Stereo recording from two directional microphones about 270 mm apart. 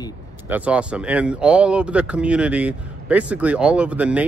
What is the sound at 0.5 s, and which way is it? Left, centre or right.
Speech, centre.